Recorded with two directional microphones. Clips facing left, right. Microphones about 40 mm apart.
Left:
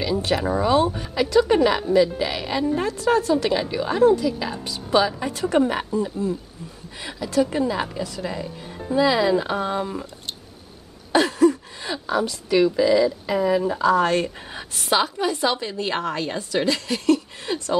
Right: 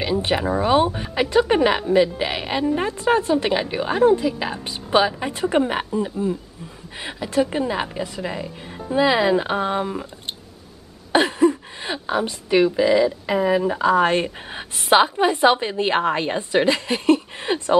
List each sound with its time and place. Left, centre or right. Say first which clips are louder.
0.0 s a woman's voice: right 1 dB; right
11.1 s a woman's voice: even; right